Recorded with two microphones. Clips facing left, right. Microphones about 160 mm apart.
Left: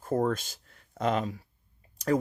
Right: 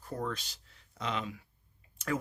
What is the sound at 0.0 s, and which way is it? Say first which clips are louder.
Speech: left 10 dB; 50° left (ahead or behind).